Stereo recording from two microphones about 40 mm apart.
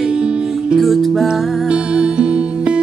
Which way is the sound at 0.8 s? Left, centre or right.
Centre.